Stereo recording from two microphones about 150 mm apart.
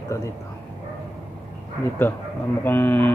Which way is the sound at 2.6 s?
15° left (ahead or behind).